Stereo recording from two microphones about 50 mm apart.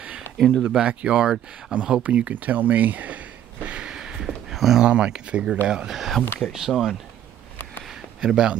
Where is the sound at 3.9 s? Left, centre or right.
Centre.